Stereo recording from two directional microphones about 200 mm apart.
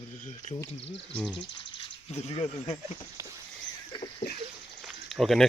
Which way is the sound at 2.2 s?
25° left (ahead or behind).